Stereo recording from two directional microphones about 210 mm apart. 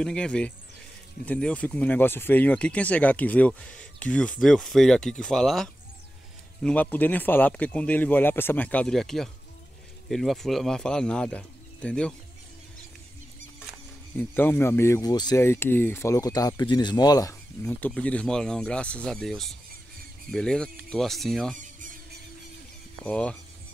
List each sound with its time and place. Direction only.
0.0 s speech: 5° left (ahead or behind)
14.1 s speech: 10° left (ahead or behind)
21.5 s a sound: 40° right (ahead or behind)
23.0 s speech: 5° left (ahead or behind)